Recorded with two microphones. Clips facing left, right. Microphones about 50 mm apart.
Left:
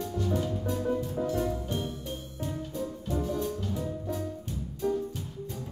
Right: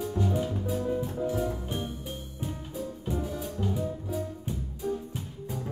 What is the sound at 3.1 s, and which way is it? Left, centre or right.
Music, centre.